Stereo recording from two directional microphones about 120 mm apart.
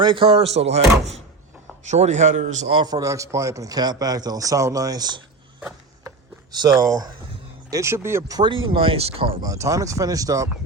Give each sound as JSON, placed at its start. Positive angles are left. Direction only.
{"t": 0.0, "sound": "speech", "side_deg": -45}
{"t": 1.9, "sound": "speech", "side_deg": -75}
{"t": 2.8, "sound": "a man's voice", "side_deg": -30}
{"t": 6.1, "sound": "a sound", "side_deg": -30}
{"t": 7.7, "sound": "speech", "side_deg": -25}
{"t": 8.4, "sound": "speech", "side_deg": -45}
{"t": 9.4, "sound": "speech", "side_deg": -30}